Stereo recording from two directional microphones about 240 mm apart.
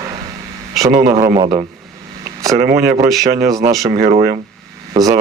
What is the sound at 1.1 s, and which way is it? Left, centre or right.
Speech, centre.